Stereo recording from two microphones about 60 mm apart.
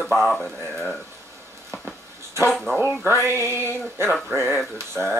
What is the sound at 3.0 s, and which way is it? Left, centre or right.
Music, right.